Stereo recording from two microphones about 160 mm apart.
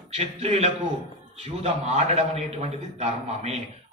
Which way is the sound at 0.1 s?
40° right (ahead or behind).